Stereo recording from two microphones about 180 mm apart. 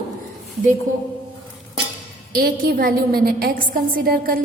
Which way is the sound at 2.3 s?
55° right (ahead or behind).